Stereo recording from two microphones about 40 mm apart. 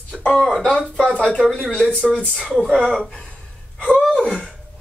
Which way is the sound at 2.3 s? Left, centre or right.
Centre.